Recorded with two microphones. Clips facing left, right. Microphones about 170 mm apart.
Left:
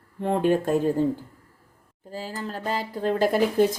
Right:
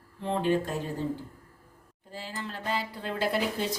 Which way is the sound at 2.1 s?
40° left (ahead or behind).